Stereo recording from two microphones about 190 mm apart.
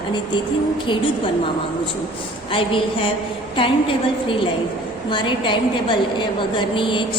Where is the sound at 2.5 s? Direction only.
25° left (ahead or behind).